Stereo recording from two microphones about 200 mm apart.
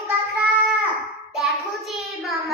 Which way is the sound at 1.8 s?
Centre (ahead or behind).